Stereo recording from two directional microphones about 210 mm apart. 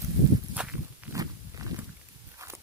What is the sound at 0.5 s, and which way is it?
Walk, 5° right (ahead or behind).